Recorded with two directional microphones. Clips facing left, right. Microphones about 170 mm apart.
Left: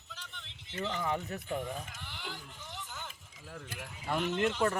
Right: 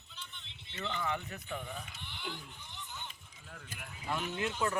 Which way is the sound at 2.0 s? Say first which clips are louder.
Left 2 dB; 90° left.